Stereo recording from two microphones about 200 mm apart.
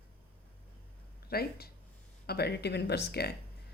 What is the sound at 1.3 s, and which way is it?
Speech, 50° left (ahead or behind).